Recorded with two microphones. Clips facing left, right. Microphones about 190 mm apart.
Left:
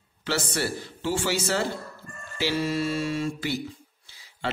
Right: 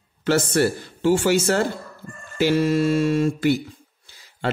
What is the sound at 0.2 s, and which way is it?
A man's voice, 50° right (ahead or behind).